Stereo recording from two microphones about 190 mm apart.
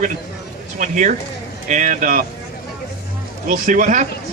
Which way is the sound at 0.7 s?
40° right (ahead or behind).